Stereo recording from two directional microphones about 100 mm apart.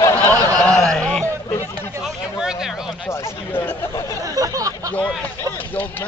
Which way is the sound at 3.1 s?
25° left (ahead or behind).